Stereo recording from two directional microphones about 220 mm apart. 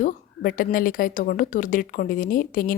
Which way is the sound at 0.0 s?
40° left (ahead or behind).